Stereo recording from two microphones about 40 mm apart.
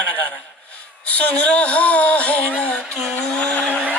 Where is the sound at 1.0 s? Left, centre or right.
Left.